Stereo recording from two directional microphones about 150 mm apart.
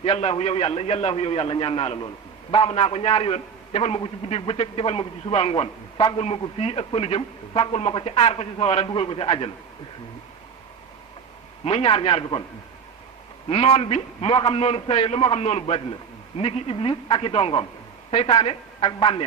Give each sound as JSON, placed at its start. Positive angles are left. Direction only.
{"t": 0.0, "sound": "a man's voice", "side_deg": 40}
{"t": 11.6, "sound": "a man's voice", "side_deg": 40}
{"t": 13.5, "sound": "a man's voice", "side_deg": 40}